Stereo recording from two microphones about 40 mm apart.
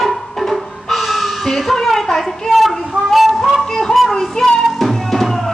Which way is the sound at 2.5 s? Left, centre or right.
Centre.